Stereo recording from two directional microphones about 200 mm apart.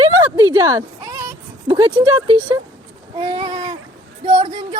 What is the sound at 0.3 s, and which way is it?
Speech, 20° right (ahead or behind).